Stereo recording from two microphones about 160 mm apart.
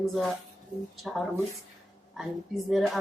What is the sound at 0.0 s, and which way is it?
Speech, centre (ahead or behind).